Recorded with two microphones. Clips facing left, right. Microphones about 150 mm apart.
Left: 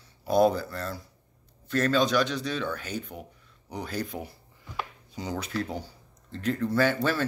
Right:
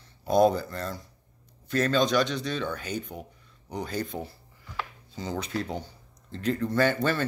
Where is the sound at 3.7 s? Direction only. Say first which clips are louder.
Right 1 dB; 5° left (ahead or behind).